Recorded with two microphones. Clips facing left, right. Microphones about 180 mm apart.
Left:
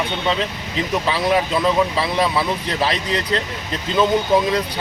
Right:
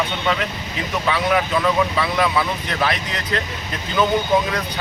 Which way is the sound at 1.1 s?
30° left (ahead or behind).